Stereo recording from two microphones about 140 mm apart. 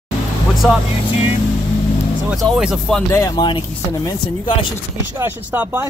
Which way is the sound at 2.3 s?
Centre (ahead or behind).